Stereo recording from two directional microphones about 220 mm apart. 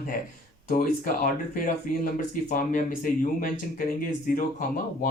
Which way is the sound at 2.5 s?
40° left (ahead or behind).